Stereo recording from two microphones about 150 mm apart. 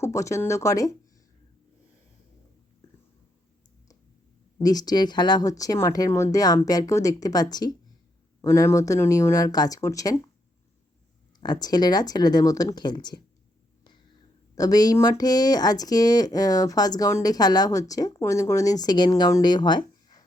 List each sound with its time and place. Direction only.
0.0 s speech: 20° left (ahead or behind)
4.6 s speech: 25° left (ahead or behind)
11.3 s speech: 30° left (ahead or behind)
14.5 s speech: 25° left (ahead or behind)